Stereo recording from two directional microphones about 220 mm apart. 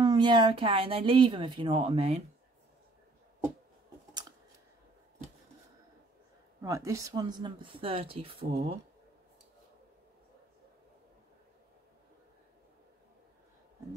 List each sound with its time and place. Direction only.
0.0 s speech: 20° right (ahead or behind)
6.6 s speech: 15° right (ahead or behind)